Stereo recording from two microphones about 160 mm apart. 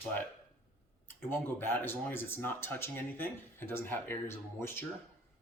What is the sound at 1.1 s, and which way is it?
Speech, 15° left (ahead or behind).